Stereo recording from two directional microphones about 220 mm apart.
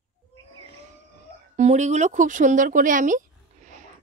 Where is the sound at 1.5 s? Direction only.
30° right (ahead or behind).